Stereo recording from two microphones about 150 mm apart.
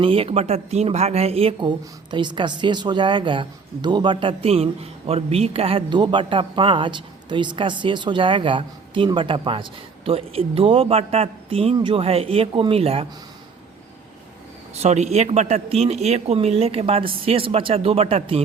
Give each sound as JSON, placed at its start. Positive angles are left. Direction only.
{"t": 0.0, "sound": "speech", "side_deg": -35}
{"t": 14.8, "sound": "speech", "side_deg": -50}